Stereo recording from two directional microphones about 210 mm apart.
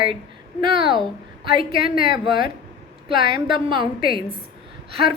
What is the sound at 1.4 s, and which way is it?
Speech, 25° right (ahead or behind).